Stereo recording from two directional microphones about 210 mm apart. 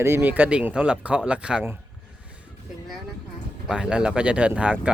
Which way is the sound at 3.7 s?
5° right (ahead or behind).